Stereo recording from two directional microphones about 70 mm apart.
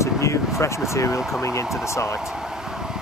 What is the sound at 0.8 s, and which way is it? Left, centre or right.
Speech, left.